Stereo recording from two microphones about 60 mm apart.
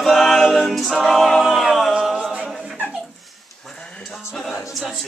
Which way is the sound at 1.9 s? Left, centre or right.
Centre.